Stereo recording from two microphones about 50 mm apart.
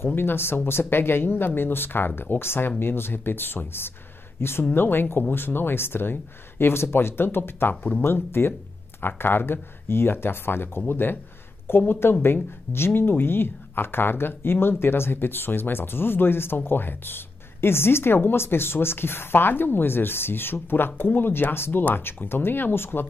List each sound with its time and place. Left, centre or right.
0.0 s speech: left